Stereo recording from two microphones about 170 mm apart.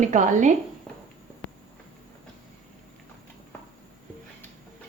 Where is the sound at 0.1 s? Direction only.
50° right (ahead or behind).